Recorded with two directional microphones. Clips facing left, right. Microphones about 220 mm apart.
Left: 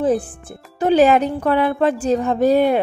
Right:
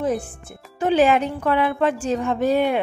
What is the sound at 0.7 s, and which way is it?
Speech, 40° left (ahead or behind).